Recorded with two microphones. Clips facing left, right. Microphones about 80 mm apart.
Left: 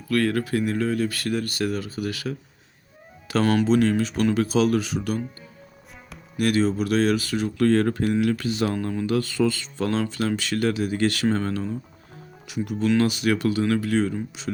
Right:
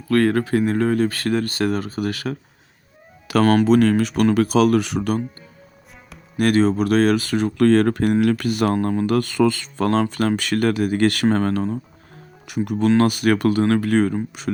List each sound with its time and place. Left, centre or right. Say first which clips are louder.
0.1 s speech: right 5 dB; right
3.4 s speech: right 5 dB; right
6.3 s speech: right 5 dB; right
8.7 s speech: right 5 dB; right